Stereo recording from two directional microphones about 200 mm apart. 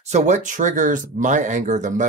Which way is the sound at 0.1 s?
35° right (ahead or behind).